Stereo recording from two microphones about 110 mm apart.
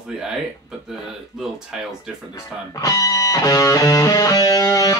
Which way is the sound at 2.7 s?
30° left (ahead or behind).